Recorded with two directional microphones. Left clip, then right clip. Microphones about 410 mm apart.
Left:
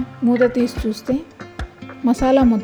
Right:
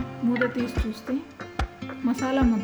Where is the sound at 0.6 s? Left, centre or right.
Centre.